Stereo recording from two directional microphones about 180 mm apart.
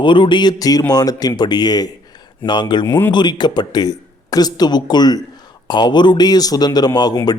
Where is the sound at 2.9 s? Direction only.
10° left (ahead or behind).